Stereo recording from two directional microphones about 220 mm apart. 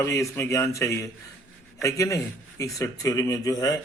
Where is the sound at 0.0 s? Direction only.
15° left (ahead or behind).